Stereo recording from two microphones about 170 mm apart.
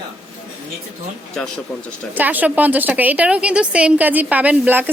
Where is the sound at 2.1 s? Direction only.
10° right (ahead or behind).